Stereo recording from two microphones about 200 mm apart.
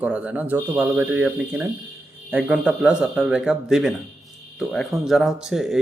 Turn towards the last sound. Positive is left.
turn(degrees=0)  # may be behind; listen again after turning